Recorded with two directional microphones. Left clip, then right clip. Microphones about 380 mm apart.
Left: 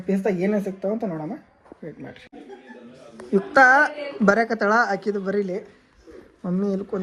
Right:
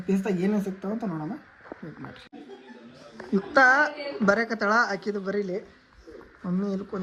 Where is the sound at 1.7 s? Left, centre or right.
Left.